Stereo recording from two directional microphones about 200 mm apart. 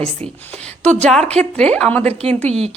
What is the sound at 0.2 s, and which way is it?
Speech, 5° left (ahead or behind).